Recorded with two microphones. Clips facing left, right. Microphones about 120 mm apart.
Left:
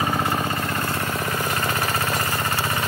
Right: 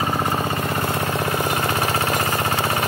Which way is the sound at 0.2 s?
20° right (ahead or behind).